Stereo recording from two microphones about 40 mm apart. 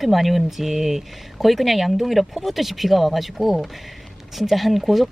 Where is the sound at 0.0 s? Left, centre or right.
Centre.